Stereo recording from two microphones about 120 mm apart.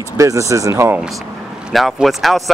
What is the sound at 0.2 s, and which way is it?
Speech, 25° right (ahead or behind).